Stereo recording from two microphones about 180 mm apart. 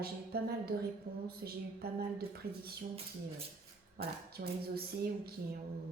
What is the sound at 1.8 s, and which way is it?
Speech, 60° right (ahead or behind).